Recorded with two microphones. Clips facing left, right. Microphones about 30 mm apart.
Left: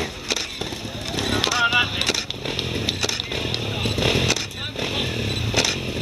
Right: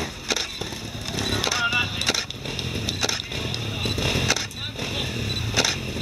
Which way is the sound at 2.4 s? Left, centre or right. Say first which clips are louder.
Left 4 dB; left.